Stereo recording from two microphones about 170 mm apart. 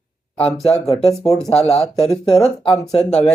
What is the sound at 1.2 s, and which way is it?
Speech, 5° left (ahead or behind).